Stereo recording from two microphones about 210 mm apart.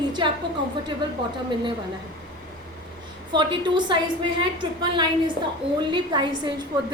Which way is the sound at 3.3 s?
20° right (ahead or behind).